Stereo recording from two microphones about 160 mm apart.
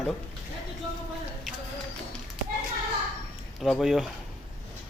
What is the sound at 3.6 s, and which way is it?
Speech, centre (ahead or behind).